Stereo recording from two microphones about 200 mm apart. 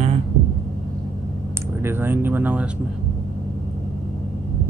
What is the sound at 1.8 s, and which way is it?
Speech, 10° right (ahead or behind).